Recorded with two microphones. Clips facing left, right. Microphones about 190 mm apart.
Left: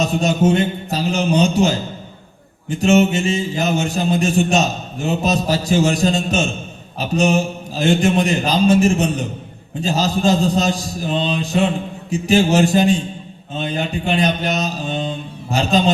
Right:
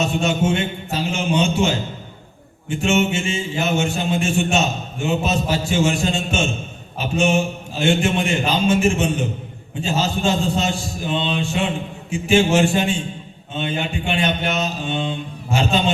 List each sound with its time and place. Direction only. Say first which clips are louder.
0.0 s mantra: left 3 dB; 40° left (ahead or behind)